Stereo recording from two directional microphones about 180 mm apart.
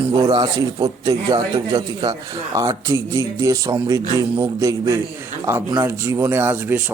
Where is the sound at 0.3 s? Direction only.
25° right (ahead or behind).